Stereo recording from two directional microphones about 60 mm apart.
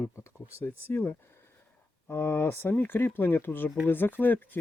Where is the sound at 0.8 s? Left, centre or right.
Left.